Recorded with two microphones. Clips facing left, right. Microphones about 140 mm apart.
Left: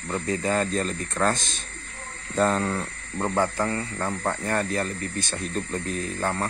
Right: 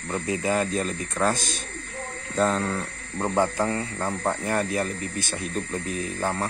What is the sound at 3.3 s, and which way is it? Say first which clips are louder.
Speech: right 2 dB; 15° right (ahead or behind).